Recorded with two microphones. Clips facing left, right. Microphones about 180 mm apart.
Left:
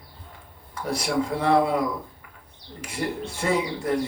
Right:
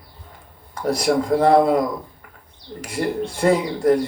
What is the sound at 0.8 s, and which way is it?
Speech, 40° right (ahead or behind).